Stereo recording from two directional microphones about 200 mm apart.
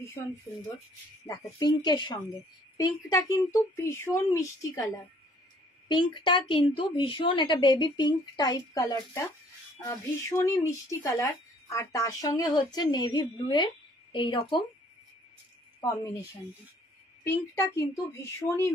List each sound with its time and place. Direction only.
1.6 s a woman's voice: 20° left (ahead or behind)
5.9 s a woman's voice: 25° left (ahead or behind)
15.9 s speech: 15° left (ahead or behind)
17.2 s speech: 15° left (ahead or behind)